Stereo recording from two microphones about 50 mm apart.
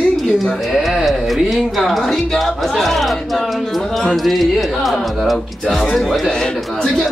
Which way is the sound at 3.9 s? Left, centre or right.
Centre.